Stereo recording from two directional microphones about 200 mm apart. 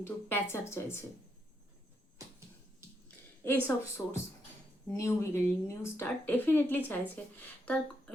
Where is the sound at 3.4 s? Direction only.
10° left (ahead or behind).